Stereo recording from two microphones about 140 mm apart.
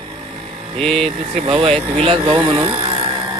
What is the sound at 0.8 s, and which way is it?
Speech, 5° left (ahead or behind).